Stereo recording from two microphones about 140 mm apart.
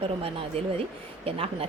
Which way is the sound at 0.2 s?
45° right (ahead or behind).